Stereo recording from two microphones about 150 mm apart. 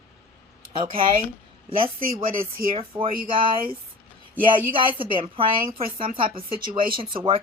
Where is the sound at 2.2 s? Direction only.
70° right (ahead or behind).